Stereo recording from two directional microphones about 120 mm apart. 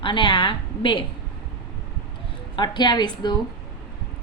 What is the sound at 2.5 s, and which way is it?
Speech, 40° left (ahead or behind).